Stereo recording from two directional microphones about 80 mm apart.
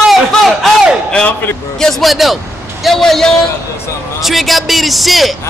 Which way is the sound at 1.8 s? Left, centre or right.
Centre.